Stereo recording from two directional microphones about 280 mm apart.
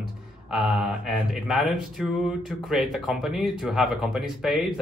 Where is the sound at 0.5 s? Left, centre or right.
Centre.